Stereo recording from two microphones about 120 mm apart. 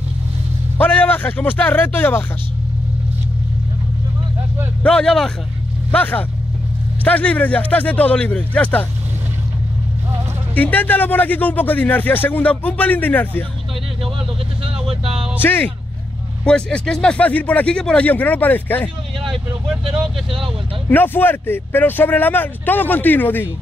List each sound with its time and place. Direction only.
0.7 s speech: 15° left (ahead or behind)
4.8 s a man's voice: 5° left (ahead or behind)
10.5 s a man's voice: 15° left (ahead or behind)
14.6 s vehicle: 55° right (ahead or behind)
15.4 s a man's voice: 15° left (ahead or behind)
20.9 s a man's voice: 15° left (ahead or behind)